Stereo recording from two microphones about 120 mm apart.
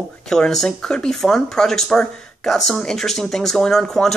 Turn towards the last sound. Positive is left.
turn(degrees=5)  # may be behind; listen again after turning